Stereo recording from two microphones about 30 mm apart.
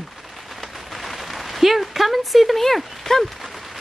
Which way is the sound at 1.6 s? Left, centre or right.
Centre.